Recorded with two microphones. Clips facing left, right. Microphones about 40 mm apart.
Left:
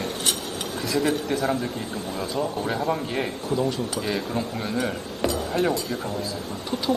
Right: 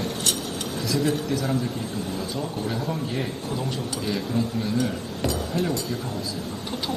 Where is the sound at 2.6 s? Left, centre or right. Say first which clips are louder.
Left 3 dB; left.